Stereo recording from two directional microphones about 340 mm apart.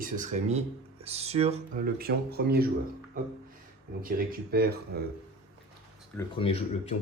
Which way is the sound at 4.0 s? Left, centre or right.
Right.